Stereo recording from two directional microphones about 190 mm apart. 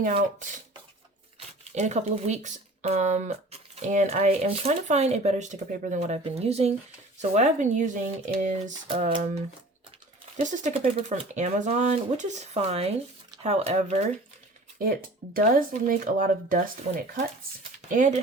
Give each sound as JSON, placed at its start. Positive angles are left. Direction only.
{"t": 0.0, "sound": "speech", "side_deg": -40}
{"t": 1.7, "sound": "speech", "side_deg": -35}
{"t": 8.9, "sound": "speech", "side_deg": -30}
{"t": 10.4, "sound": "speech", "side_deg": -40}
{"t": 14.8, "sound": "speech", "side_deg": -50}